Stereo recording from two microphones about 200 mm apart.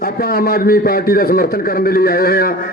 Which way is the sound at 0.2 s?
50° left (ahead or behind).